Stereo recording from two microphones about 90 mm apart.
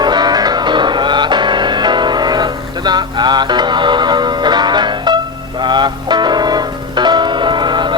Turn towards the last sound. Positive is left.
turn(degrees=-55)  # may be behind; listen again after turning